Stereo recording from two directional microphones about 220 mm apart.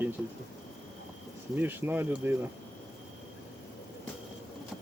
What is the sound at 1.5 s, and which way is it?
Speech, 10° right (ahead or behind).